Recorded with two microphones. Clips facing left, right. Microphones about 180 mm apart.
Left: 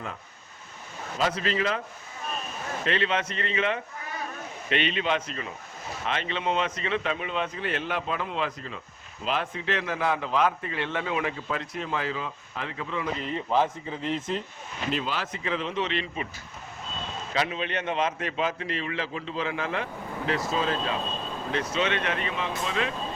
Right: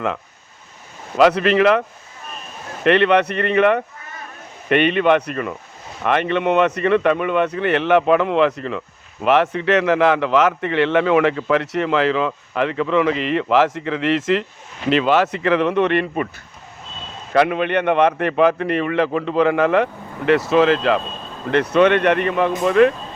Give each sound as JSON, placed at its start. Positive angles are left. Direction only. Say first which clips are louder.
{"t": 1.1, "sound": "a man's voice", "louder": "right 13 dB", "side_deg": -70}
{"t": 2.8, "sound": "a man's voice", "louder": "right 13 dB", "side_deg": -65}
{"t": 14.8, "sound": "a man's voice", "louder": "right 14 dB", "side_deg": -75}
{"t": 17.3, "sound": "a man's voice", "louder": "right 13 dB", "side_deg": -60}
{"t": 21.5, "sound": "a man's voice", "louder": "right 13 dB", "side_deg": -60}